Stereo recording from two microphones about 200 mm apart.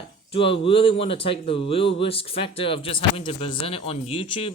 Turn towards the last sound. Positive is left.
turn(degrees=30)  # may be behind; listen again after turning